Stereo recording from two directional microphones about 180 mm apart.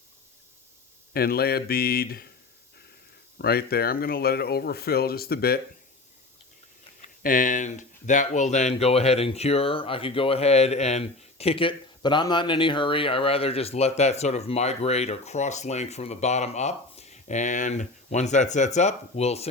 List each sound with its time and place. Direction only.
1.1 s speech: 60° left (ahead or behind)
3.3 s speech: 60° left (ahead or behind)
7.0 s speech: 50° left (ahead or behind)